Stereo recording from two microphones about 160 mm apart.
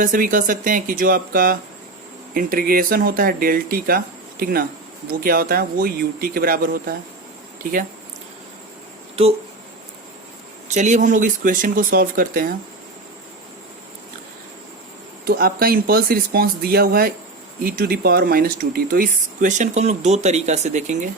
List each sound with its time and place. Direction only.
0.0 s speech: 60° right (ahead or behind)
10.8 s speech: 50° right (ahead or behind)
15.2 s speech: 70° right (ahead or behind); by 21.0 s 50° right (ahead or behind)